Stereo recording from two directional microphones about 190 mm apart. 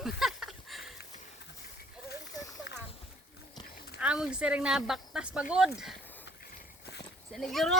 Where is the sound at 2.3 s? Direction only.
20° left (ahead or behind).